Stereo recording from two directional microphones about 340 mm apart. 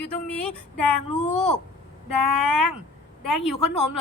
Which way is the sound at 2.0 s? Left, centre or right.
Left.